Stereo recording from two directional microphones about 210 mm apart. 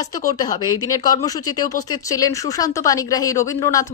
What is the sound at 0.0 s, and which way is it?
Speech, 15° left (ahead or behind).